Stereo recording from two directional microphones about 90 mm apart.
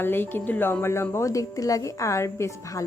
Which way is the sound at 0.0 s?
25° left (ahead or behind).